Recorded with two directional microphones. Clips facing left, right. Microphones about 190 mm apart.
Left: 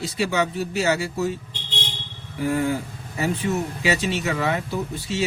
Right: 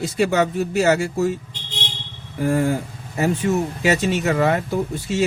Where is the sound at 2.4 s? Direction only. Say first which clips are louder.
Right 3 dB; 45° right (ahead or behind).